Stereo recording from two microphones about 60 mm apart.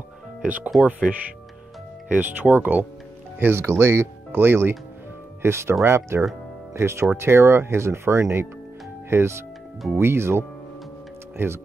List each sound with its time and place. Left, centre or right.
0.4 s speech: right
2.0 s speech: right